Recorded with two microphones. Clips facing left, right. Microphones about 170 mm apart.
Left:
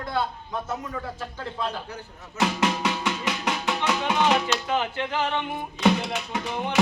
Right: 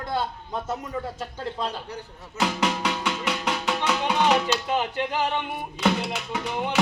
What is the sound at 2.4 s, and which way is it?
Music, 10° left (ahead or behind).